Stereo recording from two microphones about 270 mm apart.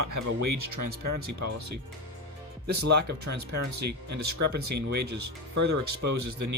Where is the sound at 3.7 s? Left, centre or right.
Right.